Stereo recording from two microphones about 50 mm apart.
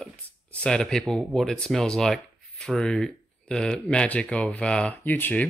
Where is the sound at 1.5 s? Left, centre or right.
Centre.